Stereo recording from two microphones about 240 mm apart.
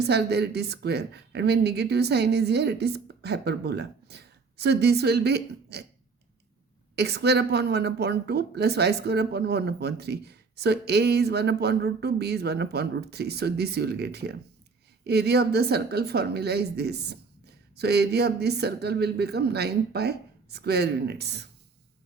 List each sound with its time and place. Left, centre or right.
0.0 s a woman's voice: right
6.9 s a woman's voice: right